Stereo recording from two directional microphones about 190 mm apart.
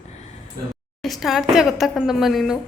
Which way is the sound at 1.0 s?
Centre (ahead or behind).